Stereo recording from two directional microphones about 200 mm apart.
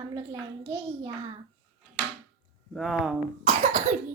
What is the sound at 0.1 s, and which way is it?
A child's voice, 25° right (ahead or behind).